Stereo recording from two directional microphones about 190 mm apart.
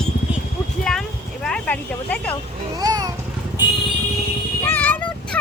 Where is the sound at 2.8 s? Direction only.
20° right (ahead or behind).